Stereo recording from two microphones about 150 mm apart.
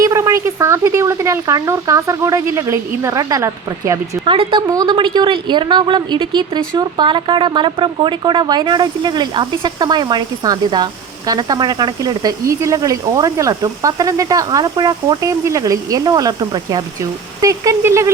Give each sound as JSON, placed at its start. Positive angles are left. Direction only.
{"t": 0.0, "sound": "a woman's voice", "side_deg": -20}
{"t": 4.3, "sound": "a woman's voice", "side_deg": -35}